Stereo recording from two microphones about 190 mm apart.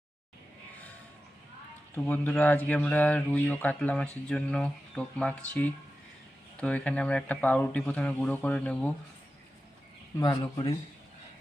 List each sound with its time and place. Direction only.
2.0 s speech: 10° left (ahead or behind)
10.2 s speech: 20° left (ahead or behind)